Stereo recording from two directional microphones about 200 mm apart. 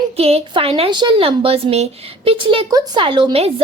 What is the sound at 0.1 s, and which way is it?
A woman's voice, 30° right (ahead or behind).